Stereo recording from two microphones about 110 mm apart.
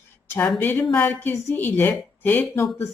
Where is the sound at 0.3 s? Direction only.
20° left (ahead or behind).